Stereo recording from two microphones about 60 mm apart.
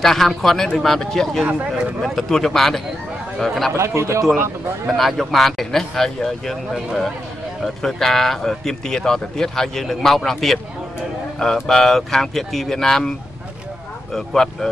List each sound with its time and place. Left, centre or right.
0.0 s speech: centre
1.4 s speech: right
2.0 s speech: centre
3.7 s speech: right
4.8 s speech: centre
14.1 s speech: centre